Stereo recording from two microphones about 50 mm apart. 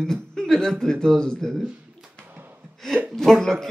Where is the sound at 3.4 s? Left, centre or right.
Centre.